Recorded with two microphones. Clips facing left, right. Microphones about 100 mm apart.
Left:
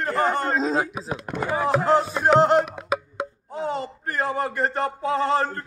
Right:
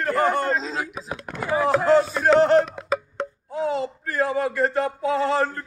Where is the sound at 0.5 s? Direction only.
45° left (ahead or behind).